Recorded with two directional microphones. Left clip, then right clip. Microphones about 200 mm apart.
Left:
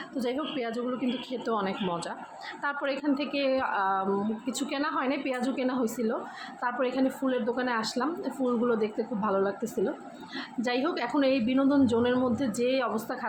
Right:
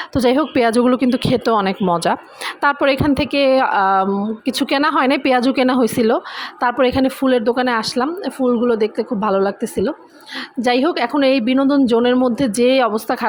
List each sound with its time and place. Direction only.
0.1 s speech: 50° right (ahead or behind)